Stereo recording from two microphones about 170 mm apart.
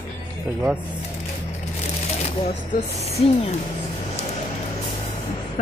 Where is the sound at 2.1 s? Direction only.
40° left (ahead or behind).